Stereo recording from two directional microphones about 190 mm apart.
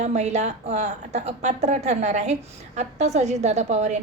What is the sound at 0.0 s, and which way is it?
A woman's voice, 35° right (ahead or behind).